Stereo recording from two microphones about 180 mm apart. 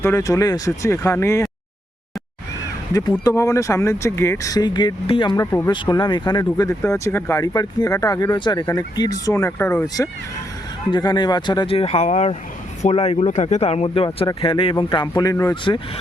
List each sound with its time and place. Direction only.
0.0 s speech: 15° left (ahead or behind)
2.9 s speech: 15° left (ahead or behind)
5.5 s speech: 15° left (ahead or behind)
5.7 s speech: 25° left (ahead or behind)